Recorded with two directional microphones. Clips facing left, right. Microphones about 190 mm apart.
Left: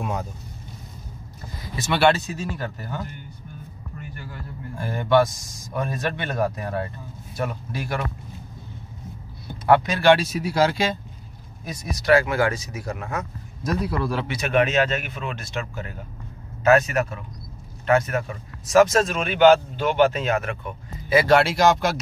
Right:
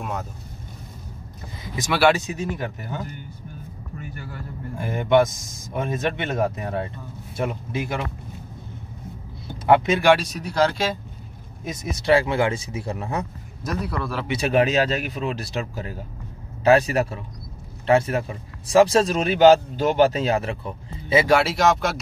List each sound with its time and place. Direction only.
0.0 s speech: centre (ahead or behind)
1.8 s a man's voice: 5° right (ahead or behind)
2.2 s a man's voice: 20° right (ahead or behind)
4.7 s speech: 20° right (ahead or behind)
9.7 s speech: 20° right (ahead or behind)
10.1 s speech: 5° left (ahead or behind)
11.6 s speech: 25° right (ahead or behind)
13.7 s speech: centre (ahead or behind)
14.3 s speech: 35° right (ahead or behind)
21.3 s speech: 5° right (ahead or behind)